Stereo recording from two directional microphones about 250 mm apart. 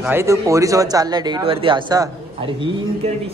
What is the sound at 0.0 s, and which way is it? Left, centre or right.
Speech, centre.